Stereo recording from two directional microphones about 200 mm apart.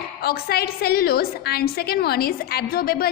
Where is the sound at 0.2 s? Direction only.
50° left (ahead or behind).